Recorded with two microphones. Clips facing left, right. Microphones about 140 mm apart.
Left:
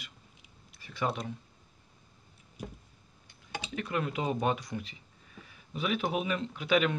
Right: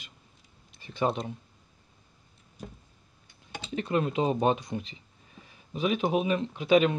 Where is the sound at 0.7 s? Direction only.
25° right (ahead or behind).